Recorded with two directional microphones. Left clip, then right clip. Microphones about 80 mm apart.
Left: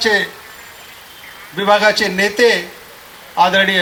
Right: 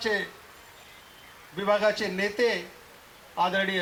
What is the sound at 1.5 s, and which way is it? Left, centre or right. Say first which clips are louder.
A man's voice: left 12 dB; left.